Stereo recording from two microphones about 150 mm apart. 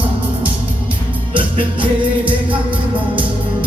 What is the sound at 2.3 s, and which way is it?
Music, 10° right (ahead or behind).